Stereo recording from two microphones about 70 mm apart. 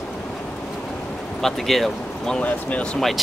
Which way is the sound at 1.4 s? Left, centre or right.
Centre.